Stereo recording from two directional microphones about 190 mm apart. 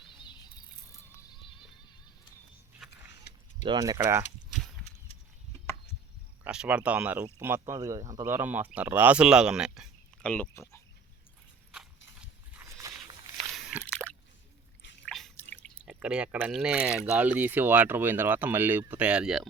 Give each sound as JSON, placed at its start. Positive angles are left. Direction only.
{"t": 0.0, "sound": "a sound", "side_deg": 25}
{"t": 3.6, "sound": "speech", "side_deg": -20}
{"t": 4.9, "sound": "a sound", "side_deg": 35}
{"t": 6.4, "sound": "speech", "side_deg": -5}
{"t": 12.2, "sound": "walk", "side_deg": -15}
{"t": 13.5, "sound": "slosh", "side_deg": -5}
{"t": 15.0, "sound": "drip", "side_deg": 5}
{"t": 15.9, "sound": "speech", "side_deg": -5}